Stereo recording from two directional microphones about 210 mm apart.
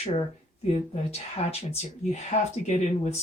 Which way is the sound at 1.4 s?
30° left (ahead or behind).